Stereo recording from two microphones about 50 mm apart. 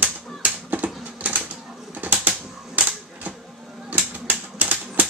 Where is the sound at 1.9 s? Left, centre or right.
Right.